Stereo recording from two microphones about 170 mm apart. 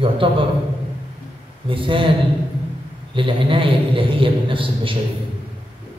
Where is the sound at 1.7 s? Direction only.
30° right (ahead or behind).